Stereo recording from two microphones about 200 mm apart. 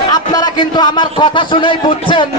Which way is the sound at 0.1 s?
20° left (ahead or behind).